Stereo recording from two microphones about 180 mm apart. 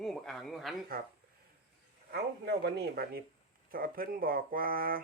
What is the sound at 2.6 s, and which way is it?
Speech, 60° right (ahead or behind).